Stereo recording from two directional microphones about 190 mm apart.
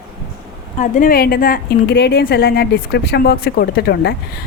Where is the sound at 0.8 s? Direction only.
45° left (ahead or behind).